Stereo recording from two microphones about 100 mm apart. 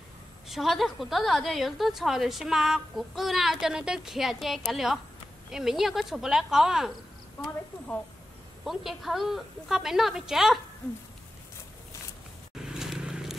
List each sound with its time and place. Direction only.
0.5 s a woman's voice: centre (ahead or behind)
8.6 s a woman's voice: centre (ahead or behind)
12.6 s a sound: 5° right (ahead or behind)